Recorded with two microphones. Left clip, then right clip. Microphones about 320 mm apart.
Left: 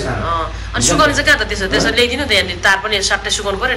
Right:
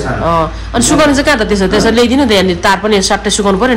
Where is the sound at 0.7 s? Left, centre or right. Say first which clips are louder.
Right 3 dB; centre.